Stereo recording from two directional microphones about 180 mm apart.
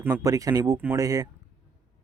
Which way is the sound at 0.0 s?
20° right (ahead or behind).